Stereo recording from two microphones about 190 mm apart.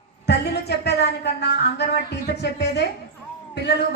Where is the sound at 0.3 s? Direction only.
60° left (ahead or behind).